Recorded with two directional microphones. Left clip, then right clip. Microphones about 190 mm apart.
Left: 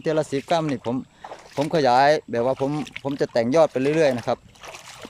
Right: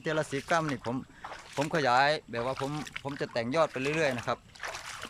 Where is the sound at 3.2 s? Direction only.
30° left (ahead or behind).